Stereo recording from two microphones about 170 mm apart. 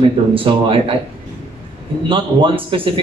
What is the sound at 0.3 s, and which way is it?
Speech, 30° right (ahead or behind).